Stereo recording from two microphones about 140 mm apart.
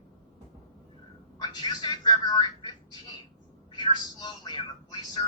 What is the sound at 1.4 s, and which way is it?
A woman's voice, 30° left (ahead or behind).